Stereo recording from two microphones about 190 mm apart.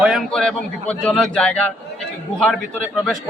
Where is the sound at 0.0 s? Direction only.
Centre (ahead or behind).